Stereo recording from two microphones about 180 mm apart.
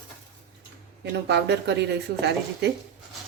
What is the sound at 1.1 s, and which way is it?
A woman's voice, 70° right (ahead or behind).